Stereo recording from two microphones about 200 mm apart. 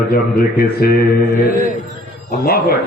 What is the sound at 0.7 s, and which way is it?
A man's voice, 50° left (ahead or behind).